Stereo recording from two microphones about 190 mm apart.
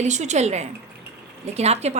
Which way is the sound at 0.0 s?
35° right (ahead or behind).